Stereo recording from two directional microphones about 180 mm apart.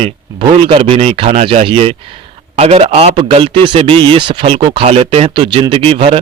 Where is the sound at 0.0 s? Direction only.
35° right (ahead or behind).